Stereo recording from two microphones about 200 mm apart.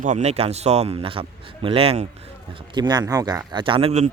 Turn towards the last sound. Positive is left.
turn(degrees=-30)  # may be behind; listen again after turning